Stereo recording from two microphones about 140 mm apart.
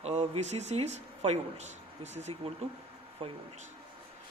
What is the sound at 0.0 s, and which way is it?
Speech, 50° right (ahead or behind).